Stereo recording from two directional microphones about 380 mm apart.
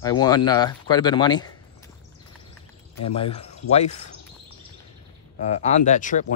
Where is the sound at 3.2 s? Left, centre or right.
Centre.